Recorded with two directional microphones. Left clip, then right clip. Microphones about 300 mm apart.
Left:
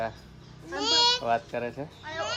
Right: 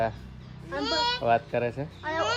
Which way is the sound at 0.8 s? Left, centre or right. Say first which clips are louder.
Left 3 dB; centre.